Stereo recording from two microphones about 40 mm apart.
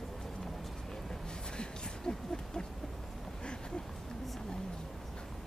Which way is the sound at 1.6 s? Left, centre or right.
Centre.